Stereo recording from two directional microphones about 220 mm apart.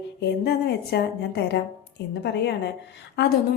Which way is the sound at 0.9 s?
50° left (ahead or behind).